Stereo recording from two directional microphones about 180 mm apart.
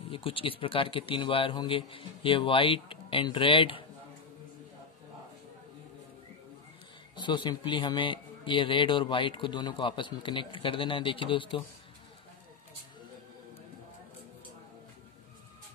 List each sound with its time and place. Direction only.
0.1 s a man's voice: 30° left (ahead or behind)
7.2 s a man's voice: 25° left (ahead or behind)